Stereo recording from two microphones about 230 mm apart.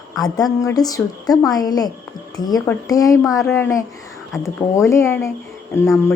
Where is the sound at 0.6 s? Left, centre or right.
Centre.